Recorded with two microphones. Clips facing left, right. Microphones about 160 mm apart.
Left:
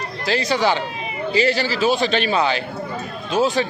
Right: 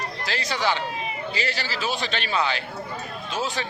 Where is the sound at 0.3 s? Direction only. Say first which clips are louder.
Left 7 dB; 15° left (ahead or behind).